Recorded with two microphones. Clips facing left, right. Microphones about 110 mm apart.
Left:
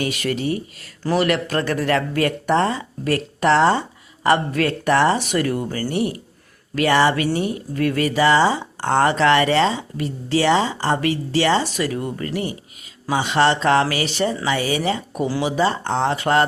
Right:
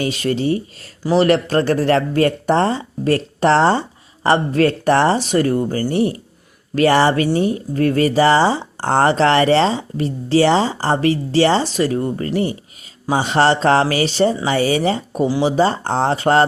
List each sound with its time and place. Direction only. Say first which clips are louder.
0.0 s speech: right 4 dB; 30° right (ahead or behind)